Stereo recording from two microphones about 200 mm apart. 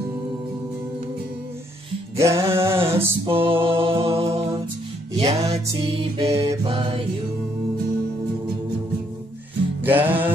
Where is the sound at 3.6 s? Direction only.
25° right (ahead or behind).